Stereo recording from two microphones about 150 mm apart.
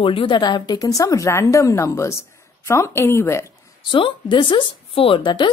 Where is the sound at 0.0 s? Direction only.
35° left (ahead or behind); by 3.4 s 20° left (ahead or behind).